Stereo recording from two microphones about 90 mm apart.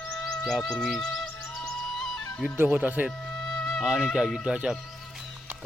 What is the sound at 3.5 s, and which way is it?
Music, 5° left (ahead or behind).